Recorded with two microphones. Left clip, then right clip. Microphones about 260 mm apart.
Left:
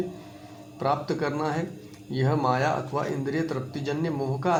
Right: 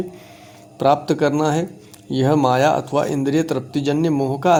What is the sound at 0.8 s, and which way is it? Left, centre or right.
Speech, right.